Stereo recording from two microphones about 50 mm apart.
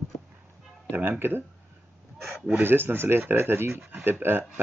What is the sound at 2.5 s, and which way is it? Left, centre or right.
Speech, right.